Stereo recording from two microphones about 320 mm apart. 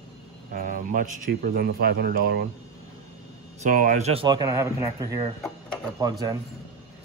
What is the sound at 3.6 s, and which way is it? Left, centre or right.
Speech, right.